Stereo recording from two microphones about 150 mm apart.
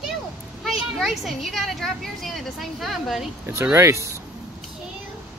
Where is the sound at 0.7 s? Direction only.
Centre (ahead or behind).